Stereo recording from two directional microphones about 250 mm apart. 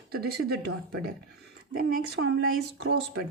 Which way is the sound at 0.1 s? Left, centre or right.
Right.